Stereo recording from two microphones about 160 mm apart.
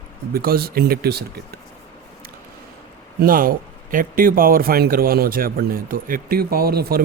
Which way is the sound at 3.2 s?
65° right (ahead or behind).